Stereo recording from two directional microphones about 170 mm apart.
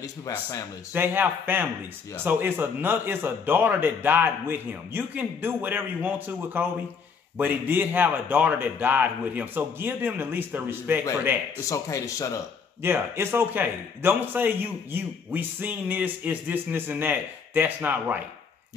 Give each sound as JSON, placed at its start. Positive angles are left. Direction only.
{"t": 0.9, "sound": "speech", "side_deg": -10}
{"t": 11.7, "sound": "speech", "side_deg": 20}
{"t": 12.8, "sound": "speech", "side_deg": -15}